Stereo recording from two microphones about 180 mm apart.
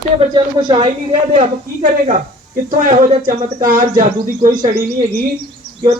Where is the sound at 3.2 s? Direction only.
50° right (ahead or behind).